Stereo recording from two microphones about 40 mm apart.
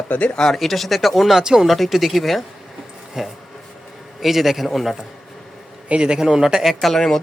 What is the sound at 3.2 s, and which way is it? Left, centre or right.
Speech, centre.